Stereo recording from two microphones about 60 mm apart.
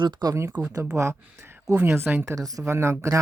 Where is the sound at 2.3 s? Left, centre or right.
Right.